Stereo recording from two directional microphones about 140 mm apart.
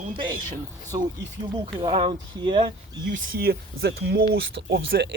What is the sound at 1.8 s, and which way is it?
Speech, 35° right (ahead or behind).